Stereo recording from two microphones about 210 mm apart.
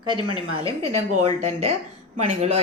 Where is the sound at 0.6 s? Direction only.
30° right (ahead or behind).